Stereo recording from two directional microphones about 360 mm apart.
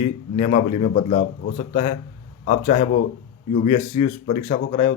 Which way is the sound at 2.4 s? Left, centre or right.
Centre.